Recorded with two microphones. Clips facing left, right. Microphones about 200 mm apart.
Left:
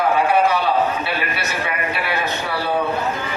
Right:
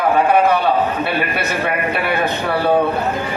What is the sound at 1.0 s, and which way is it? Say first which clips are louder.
A man's voice: right 5 dB; 55° right (ahead or behind).